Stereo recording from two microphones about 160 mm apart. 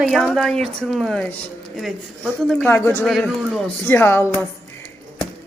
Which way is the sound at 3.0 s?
Centre (ahead or behind).